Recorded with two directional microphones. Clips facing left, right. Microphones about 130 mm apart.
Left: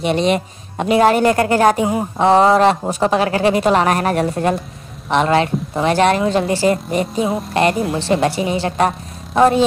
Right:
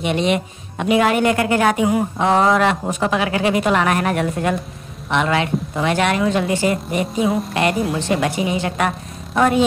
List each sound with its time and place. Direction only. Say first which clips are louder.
0.0 s a woman's voice: left 2 dB; 35° left (ahead or behind)
7.2 s music: right 1 dB; centre (ahead or behind)
7.5 s a woman's voice: left 3 dB; 30° left (ahead or behind)